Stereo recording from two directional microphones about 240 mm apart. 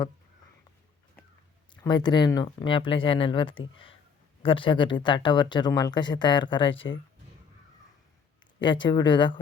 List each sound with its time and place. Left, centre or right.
1.7 s speech: centre
6.7 s speech: left
8.6 s speech: centre